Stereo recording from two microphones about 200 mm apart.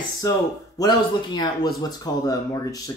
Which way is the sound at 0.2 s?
20° left (ahead or behind).